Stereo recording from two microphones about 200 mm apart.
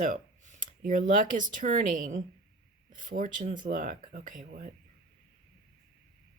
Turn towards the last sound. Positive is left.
turn(degrees=-45)  # may be behind; listen again after turning